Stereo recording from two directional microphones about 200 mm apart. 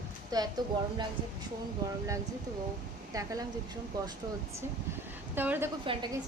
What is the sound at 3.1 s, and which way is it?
Speech, 15° right (ahead or behind).